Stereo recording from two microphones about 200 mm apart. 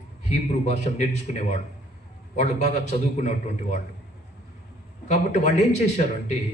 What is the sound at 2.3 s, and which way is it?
Speech, 35° left (ahead or behind).